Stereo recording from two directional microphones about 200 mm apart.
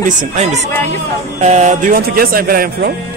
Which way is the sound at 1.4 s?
35° right (ahead or behind).